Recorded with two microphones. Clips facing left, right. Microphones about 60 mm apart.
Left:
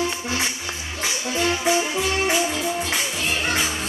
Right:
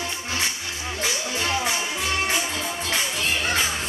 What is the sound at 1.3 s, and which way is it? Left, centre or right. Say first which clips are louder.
Music: left 7 dB; centre.